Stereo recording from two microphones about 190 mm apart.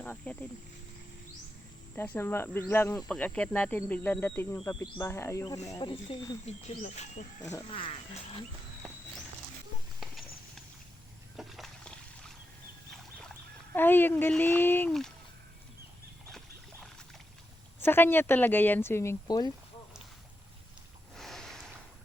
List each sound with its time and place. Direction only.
0.0 s speech: 5° left (ahead or behind)
2.0 s speech: 10° left (ahead or behind)
6.4 s speech: 35° left (ahead or behind)
10.0 s clip-clop: centre (ahead or behind)
11.3 s boat: centre (ahead or behind)
13.7 s speech: 10° left (ahead or behind)
17.7 s speech: 10° left (ahead or behind)
21.2 s snort: centre (ahead or behind)